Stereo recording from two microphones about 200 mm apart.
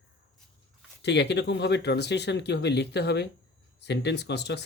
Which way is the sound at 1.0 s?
60° left (ahead or behind).